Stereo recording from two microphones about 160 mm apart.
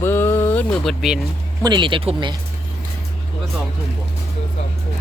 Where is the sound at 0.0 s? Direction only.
15° left (ahead or behind).